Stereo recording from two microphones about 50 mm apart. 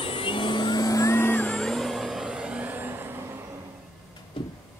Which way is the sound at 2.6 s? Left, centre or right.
Right.